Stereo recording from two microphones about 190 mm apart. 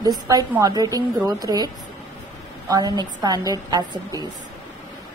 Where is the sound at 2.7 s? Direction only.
20° right (ahead or behind).